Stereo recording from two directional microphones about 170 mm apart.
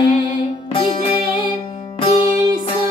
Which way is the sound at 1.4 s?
25° left (ahead or behind).